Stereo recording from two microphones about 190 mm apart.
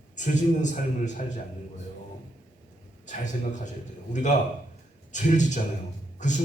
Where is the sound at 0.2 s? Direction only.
40° left (ahead or behind).